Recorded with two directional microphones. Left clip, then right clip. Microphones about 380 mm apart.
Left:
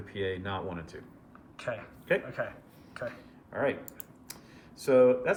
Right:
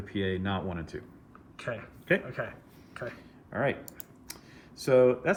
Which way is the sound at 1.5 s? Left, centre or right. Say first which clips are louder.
Even; centre.